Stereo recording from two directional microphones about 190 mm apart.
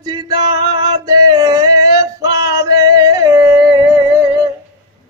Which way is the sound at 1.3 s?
20° right (ahead or behind).